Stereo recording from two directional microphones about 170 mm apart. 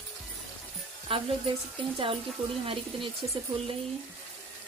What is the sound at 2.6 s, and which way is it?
Speech, 30° right (ahead or behind).